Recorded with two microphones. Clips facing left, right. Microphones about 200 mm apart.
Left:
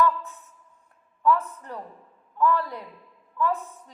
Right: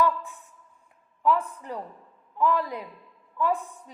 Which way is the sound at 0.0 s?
15° right (ahead or behind).